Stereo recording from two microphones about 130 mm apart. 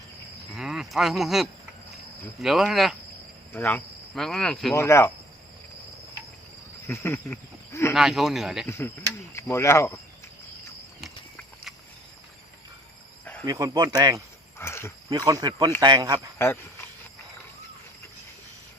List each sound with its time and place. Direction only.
0.5 s cricket: 5° right (ahead or behind)
2.4 s speech: 5° right (ahead or behind)
3.5 s cricket: 15° left (ahead or behind)
4.1 s speech: 5° left (ahead or behind)
4.7 s speech: 20° left (ahead or behind)
6.8 s speech: 15° left (ahead or behind)
7.9 s speech: centre (ahead or behind)
8.6 s speech: 20° left (ahead or behind)
13.4 s speech: 30° right (ahead or behind)
14.6 s speech: 20° left (ahead or behind)
15.1 s speech: 30° right (ahead or behind)